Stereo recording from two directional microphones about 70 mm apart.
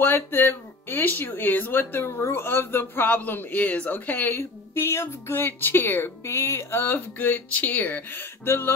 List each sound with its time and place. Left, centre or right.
0.0 s speech: left